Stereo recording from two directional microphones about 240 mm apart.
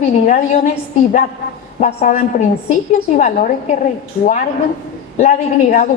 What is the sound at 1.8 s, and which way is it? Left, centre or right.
A woman's voice, left.